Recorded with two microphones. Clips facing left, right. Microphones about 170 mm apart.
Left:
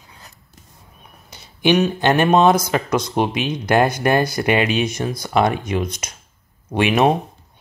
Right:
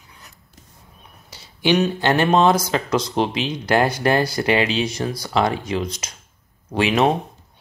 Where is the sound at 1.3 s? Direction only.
20° left (ahead or behind).